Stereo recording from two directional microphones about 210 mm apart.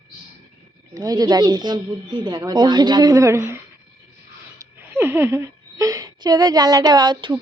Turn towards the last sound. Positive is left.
turn(degrees=-20)  # may be behind; listen again after turning